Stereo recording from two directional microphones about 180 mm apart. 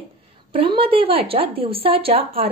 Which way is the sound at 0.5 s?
30° right (ahead or behind).